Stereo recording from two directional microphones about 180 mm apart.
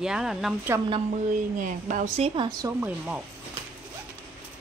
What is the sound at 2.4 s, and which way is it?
Speech, 20° right (ahead or behind).